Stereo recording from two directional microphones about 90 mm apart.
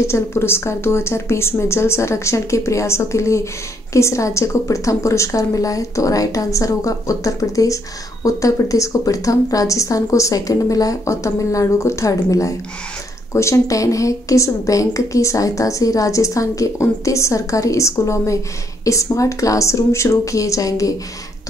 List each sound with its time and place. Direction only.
0.0 s a woman's voice: 30° left (ahead or behind)